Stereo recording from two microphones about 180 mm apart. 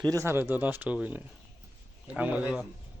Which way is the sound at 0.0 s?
20° right (ahead or behind).